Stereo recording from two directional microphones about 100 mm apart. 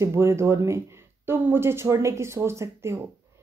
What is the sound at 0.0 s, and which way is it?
A woman's voice, 25° right (ahead or behind).